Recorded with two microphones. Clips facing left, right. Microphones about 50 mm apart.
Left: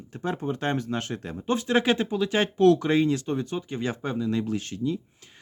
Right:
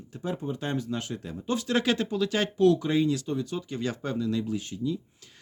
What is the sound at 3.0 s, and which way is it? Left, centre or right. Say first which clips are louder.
Speech: left 2 dB; left.